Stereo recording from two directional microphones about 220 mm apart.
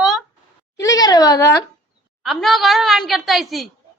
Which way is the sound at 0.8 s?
15° left (ahead or behind).